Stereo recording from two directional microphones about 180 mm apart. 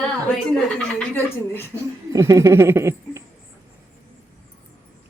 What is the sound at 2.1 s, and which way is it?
Speech, 15° right (ahead or behind).